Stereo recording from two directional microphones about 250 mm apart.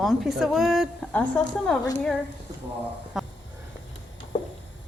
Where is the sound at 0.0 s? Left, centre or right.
Centre.